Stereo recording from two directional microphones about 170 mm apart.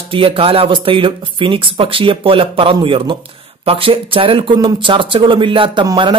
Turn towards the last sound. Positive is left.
turn(degrees=-25)  # may be behind; listen again after turning